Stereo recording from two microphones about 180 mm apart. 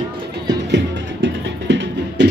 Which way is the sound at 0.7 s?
85° right.